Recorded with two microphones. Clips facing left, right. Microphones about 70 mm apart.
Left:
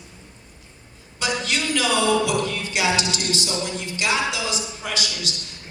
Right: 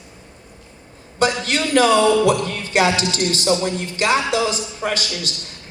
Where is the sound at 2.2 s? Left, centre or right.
Right.